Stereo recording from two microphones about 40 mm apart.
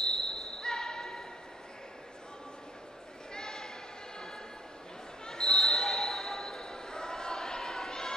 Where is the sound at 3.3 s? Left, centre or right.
Centre.